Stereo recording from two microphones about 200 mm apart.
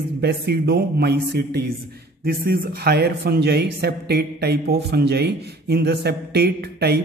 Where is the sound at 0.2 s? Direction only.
55° right (ahead or behind).